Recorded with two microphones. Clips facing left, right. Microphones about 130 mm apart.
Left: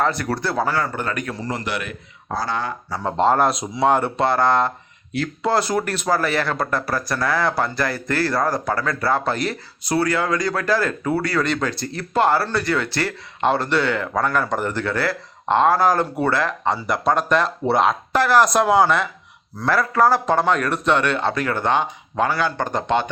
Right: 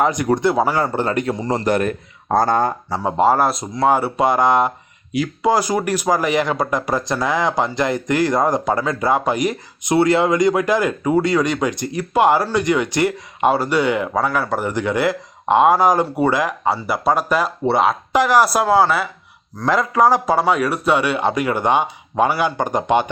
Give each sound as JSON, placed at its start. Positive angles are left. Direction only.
{"t": 0.0, "sound": "speech", "side_deg": -15}
{"t": 1.5, "sound": "speech", "side_deg": -40}
{"t": 3.0, "sound": "speech", "side_deg": -10}
{"t": 18.1, "sound": "speech", "side_deg": -15}
{"t": 19.6, "sound": "speech", "side_deg": -15}